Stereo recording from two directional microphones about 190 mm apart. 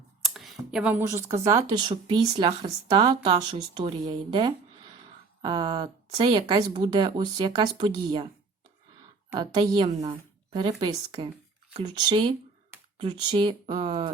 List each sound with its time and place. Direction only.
0.2 s speech: centre (ahead or behind); by 8.3 s 25° right (ahead or behind)
9.3 s speech: 20° right (ahead or behind)